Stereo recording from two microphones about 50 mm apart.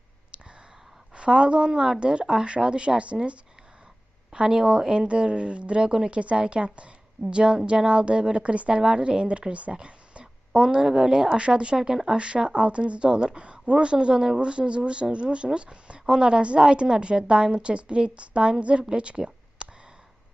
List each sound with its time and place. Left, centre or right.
0.3 s a sound: right
1.1 s speech: right
4.3 s speech: centre